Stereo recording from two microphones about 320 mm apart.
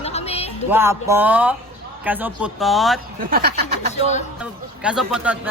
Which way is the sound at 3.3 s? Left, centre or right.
Right.